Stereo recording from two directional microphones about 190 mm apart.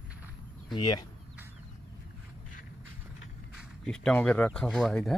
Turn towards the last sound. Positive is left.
turn(degrees=0)  # may be behind; listen again after turning